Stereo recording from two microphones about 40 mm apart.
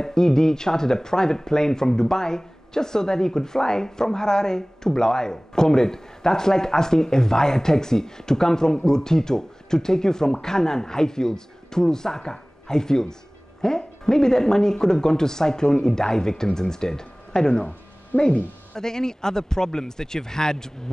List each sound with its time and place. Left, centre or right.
0.0 s speech: centre